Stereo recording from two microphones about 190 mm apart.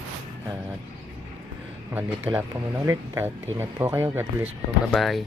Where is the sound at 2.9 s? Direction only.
15° right (ahead or behind).